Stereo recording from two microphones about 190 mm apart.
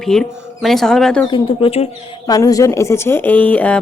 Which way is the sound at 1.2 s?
25° left (ahead or behind).